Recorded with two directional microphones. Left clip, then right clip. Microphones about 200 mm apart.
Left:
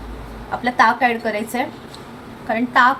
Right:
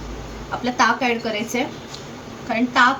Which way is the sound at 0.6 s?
30° left (ahead or behind).